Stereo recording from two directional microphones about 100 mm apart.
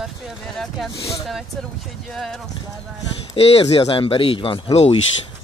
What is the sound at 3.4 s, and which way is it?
Speech, 85° left.